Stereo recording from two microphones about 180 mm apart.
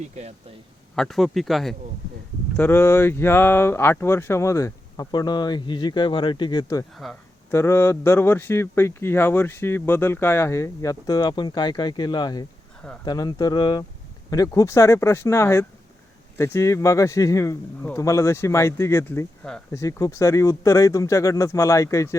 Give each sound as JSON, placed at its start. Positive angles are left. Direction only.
{"t": 0.0, "sound": "speech", "side_deg": -35}
{"t": 0.9, "sound": "speech", "side_deg": 0}
{"t": 2.6, "sound": "speech", "side_deg": 10}
{"t": 6.9, "sound": "speech", "side_deg": 0}
{"t": 7.5, "sound": "speech", "side_deg": 15}
{"t": 19.8, "sound": "speech", "side_deg": 15}